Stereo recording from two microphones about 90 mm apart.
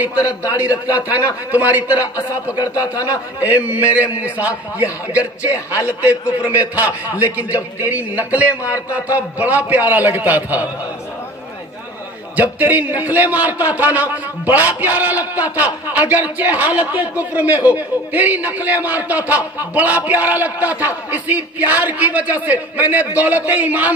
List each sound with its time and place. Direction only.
0.1 s a man's voice: 45° left (ahead or behind)
0.8 s a man's voice: 15° right (ahead or behind)
2.6 s a man's voice: 40° left (ahead or behind)
3.3 s a man's voice: 20° right (ahead or behind)
5.5 s a man's voice: 35° left (ahead or behind)
6.7 s a man's voice: 20° right (ahead or behind)
12.4 s a man's voice: 20° right (ahead or behind)